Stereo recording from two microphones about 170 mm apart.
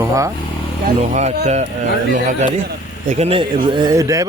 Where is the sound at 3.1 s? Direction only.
40° right (ahead or behind); by 4.3 s 20° right (ahead or behind).